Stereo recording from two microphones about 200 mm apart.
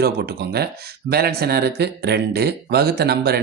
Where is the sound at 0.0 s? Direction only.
50° right (ahead or behind).